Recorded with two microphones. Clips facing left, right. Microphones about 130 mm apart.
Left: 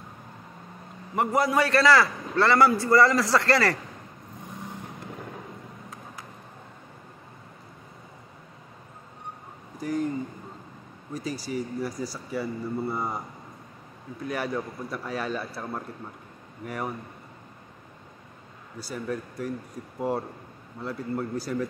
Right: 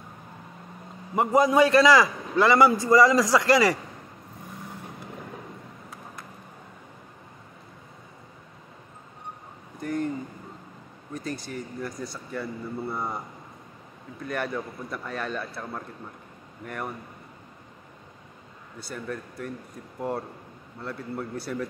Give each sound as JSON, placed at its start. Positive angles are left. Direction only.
{"t": 1.1, "sound": "a man's voice", "side_deg": -20}
{"t": 9.8, "sound": "a sound", "side_deg": 0}
{"t": 11.1, "sound": "a man's voice", "side_deg": 0}
{"t": 14.2, "sound": "a man's voice", "side_deg": 5}
{"t": 18.8, "sound": "a man's voice", "side_deg": 0}